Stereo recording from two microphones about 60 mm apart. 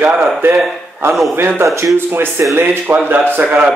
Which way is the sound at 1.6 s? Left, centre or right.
Right.